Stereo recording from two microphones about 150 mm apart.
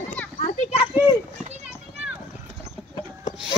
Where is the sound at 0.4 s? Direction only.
45° left (ahead or behind).